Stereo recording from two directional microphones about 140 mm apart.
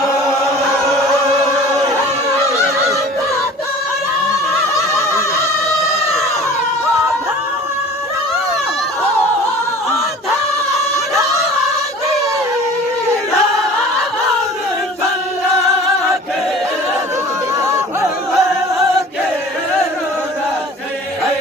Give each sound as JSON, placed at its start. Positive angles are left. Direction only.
{"t": 0.4, "sound": "chant", "side_deg": 0}
{"t": 2.5, "sound": "music", "side_deg": -20}
{"t": 5.1, "sound": "a sound", "side_deg": 20}
{"t": 10.7, "sound": "crowd", "side_deg": 0}
{"t": 11.1, "sound": "a sound", "side_deg": -20}
{"t": 17.6, "sound": "chatter", "side_deg": -20}
{"t": 18.0, "sound": "singing", "side_deg": 0}